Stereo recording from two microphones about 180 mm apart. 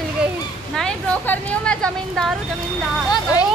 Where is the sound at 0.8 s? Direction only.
5° left (ahead or behind).